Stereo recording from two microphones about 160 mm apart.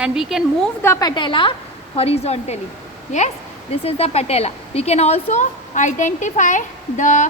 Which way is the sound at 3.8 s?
40° left (ahead or behind).